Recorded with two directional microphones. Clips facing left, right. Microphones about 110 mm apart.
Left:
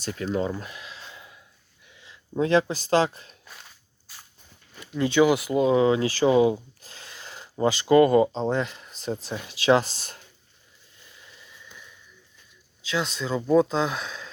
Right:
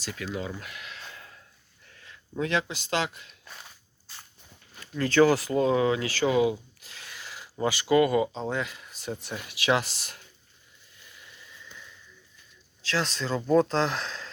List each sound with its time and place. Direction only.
0.0 s speech: 45° left (ahead or behind)
0.6 s a sound: 25° left (ahead or behind)
1.9 s speech: 20° left (ahead or behind); by 3.3 s 35° left (ahead or behind)
3.4 s walk: centre (ahead or behind)
4.1 s a sound: 5° left (ahead or behind)
4.9 s speech: 15° left (ahead or behind); by 10.2 s 35° left (ahead or behind)
12.9 s speech: 5° left (ahead or behind)